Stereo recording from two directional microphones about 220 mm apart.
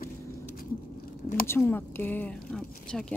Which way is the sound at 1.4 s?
10° left (ahead or behind).